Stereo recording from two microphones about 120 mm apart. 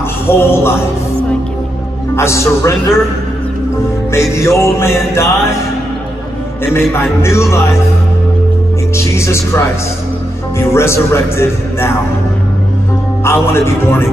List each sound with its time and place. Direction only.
0.3 s speech: 20° left (ahead or behind)
2.1 s speech: 25° left (ahead or behind)
4.1 s speech: 25° left (ahead or behind)
6.6 s speech: 20° left (ahead or behind)
8.9 s speech: 25° left (ahead or behind)
13.2 s speech: 20° left (ahead or behind)